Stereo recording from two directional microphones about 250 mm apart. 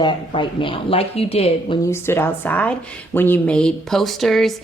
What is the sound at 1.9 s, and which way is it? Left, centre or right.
A woman's voice, centre.